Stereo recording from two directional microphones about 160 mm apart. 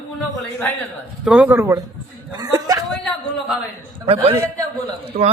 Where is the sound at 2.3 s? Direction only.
25° right (ahead or behind).